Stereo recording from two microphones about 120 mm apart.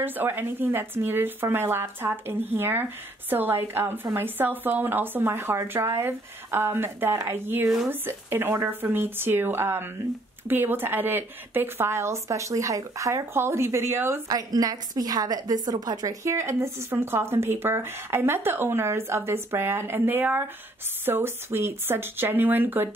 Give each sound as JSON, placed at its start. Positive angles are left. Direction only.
{"t": 0.0, "sound": "speech", "side_deg": -15}
{"t": 14.3, "sound": "speech", "side_deg": -30}